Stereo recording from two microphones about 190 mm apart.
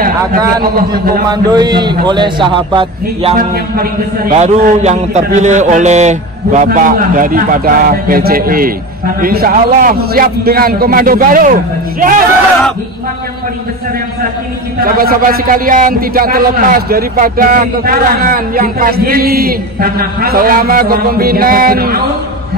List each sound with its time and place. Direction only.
0.6 s a man's voice: 50° right (ahead or behind)
1.3 s a man's voice: 20° right (ahead or behind)
3.3 s a man's voice: 50° right (ahead or behind)
4.4 s a man's voice: 35° right (ahead or behind)
14.8 s a man's voice: 50° right (ahead or behind)